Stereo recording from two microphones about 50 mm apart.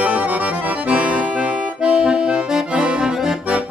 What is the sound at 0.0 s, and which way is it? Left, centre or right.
Accordion, right.